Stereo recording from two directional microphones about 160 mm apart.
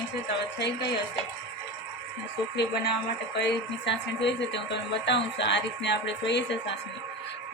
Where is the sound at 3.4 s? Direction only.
90° left.